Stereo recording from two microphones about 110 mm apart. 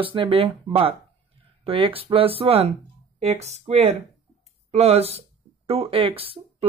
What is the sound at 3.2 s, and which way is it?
Speech, 75° right (ahead or behind).